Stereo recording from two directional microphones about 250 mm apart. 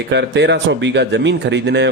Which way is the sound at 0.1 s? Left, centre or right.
Right.